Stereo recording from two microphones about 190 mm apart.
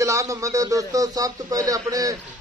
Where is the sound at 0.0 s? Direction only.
15° right (ahead or behind).